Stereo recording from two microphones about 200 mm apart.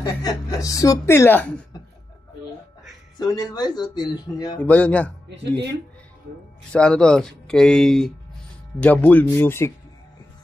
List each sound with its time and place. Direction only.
0.0 s a woman's voice: 20° left (ahead or behind)
3.2 s speech: 20° left (ahead or behind)
4.6 s a woman's voice: 5° left (ahead or behind)
5.3 s speech: 60° right (ahead or behind)
6.7 s a woman's voice: 5° left (ahead or behind)